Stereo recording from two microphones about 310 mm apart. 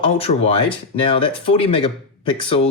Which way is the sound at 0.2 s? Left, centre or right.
Centre.